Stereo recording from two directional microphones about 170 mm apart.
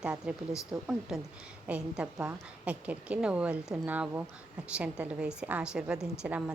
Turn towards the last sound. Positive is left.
turn(degrees=-10)  # may be behind; listen again after turning